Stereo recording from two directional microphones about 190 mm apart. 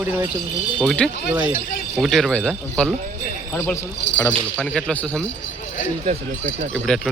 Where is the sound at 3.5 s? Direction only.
10° left (ahead or behind).